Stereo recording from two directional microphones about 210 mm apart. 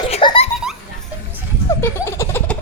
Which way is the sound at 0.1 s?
25° left (ahead or behind).